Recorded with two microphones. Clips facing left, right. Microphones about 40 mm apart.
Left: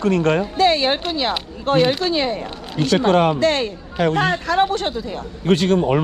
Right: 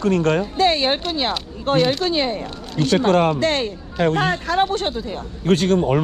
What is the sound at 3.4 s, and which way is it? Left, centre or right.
Speech, left.